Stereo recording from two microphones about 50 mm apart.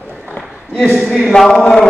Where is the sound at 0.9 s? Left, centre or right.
Centre.